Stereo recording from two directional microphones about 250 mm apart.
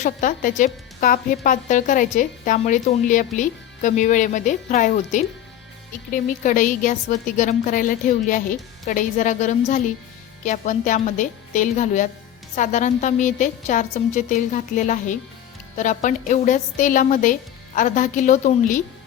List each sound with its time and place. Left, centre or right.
0.0 s a woman's voice: left